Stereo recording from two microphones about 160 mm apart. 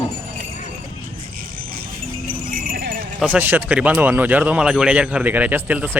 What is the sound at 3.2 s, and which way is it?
Speech, 10° right (ahead or behind).